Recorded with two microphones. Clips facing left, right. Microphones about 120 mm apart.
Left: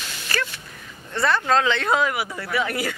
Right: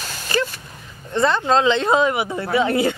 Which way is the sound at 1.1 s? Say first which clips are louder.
Right 3 dB; 20° right (ahead or behind).